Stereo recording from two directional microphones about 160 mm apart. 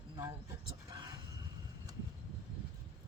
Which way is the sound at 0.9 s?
25° right (ahead or behind).